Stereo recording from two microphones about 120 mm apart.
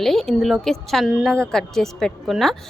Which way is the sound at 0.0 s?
Centre (ahead or behind).